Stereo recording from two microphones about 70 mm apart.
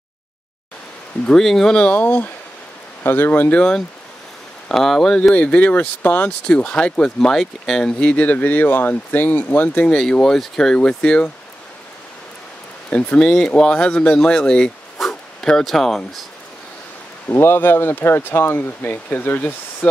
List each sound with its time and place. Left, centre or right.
1.2 s speech: centre
1.9 s speech: left
4.6 s speech: centre
5.3 s speech: centre
6.4 s speech: centre
8.0 s speech: centre
9.8 s speech: centre
12.9 s speech: centre
15.0 s dog: centre
17.3 s speech: left